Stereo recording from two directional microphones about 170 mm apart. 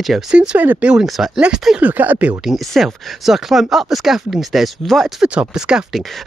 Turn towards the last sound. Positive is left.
turn(degrees=0)  # may be behind; listen again after turning